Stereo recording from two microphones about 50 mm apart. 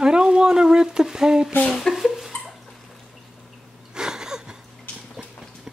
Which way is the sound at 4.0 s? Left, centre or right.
Centre.